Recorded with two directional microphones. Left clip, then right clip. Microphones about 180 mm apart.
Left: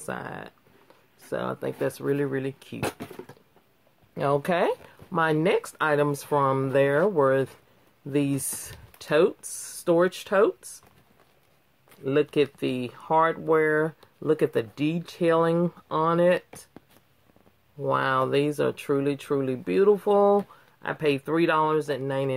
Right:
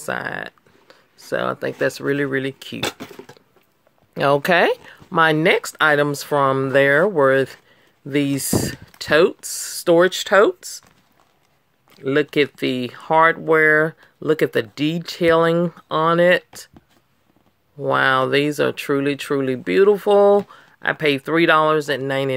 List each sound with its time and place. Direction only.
0.0 s speech: 45° right (ahead or behind)
2.8 s a sound: 30° right (ahead or behind)
4.1 s speech: 40° right (ahead or behind)
12.0 s speech: 40° right (ahead or behind)
17.8 s speech: 45° right (ahead or behind)